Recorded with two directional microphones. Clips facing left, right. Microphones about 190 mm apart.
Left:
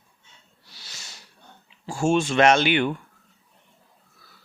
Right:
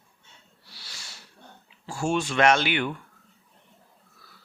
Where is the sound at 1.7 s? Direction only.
25° left (ahead or behind).